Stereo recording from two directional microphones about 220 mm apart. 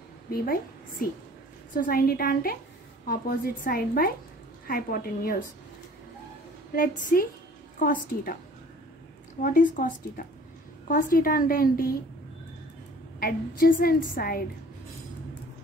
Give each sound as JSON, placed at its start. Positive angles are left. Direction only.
{"t": 0.3, "sound": "a woman's voice", "side_deg": 40}
{"t": 7.8, "sound": "a woman's voice", "side_deg": 40}
{"t": 9.4, "sound": "a woman's voice", "side_deg": 40}
{"t": 13.2, "sound": "a woman's voice", "side_deg": 40}